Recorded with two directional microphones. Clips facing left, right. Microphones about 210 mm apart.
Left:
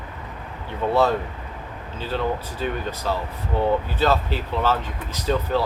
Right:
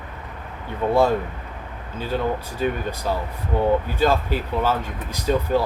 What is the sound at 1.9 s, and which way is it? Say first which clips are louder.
Speech: right 1 dB; 10° right (ahead or behind).